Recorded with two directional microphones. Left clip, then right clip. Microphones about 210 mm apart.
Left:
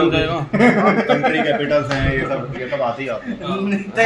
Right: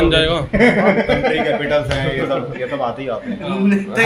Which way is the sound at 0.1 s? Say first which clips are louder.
Right 4 dB; 40° right (ahead or behind).